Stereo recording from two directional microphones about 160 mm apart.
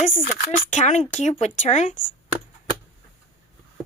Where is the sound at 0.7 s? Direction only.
50° left (ahead or behind).